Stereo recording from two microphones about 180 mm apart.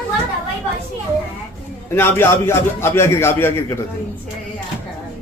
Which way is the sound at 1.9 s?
10° left (ahead or behind).